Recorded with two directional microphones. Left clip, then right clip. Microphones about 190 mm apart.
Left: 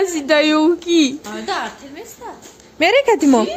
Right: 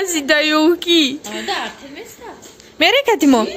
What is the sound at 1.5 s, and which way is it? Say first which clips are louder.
Speech: left 1 dB; 30° left (ahead or behind).